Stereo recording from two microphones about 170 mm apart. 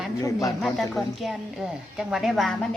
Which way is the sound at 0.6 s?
Centre (ahead or behind).